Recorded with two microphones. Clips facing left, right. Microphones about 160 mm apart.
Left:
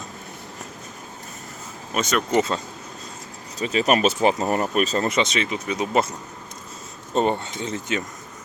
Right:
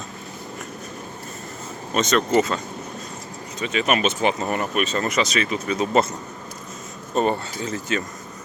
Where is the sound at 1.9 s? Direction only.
10° left (ahead or behind).